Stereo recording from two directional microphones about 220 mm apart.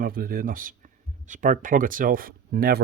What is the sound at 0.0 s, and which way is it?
Speech, 40° right (ahead or behind).